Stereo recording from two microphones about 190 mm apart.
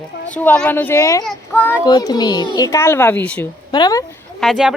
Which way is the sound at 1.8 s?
20° left (ahead or behind).